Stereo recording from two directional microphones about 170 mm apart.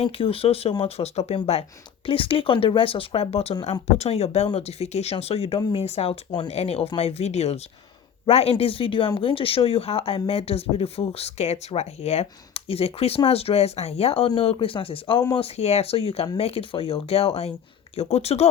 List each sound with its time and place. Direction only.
0.0 s speech: 35° left (ahead or behind)